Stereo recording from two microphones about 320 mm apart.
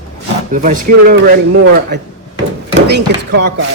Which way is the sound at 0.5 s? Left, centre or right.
Right.